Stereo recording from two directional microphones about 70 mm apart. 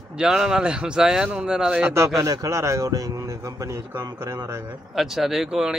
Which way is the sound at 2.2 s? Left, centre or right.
Right.